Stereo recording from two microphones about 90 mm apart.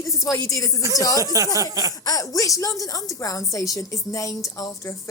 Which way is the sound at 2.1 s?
40° left (ahead or behind).